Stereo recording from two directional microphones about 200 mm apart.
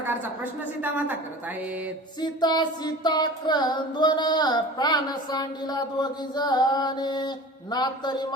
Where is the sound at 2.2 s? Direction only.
20° left (ahead or behind).